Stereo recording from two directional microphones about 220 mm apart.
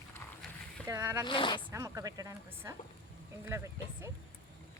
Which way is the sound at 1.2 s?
20° left (ahead or behind).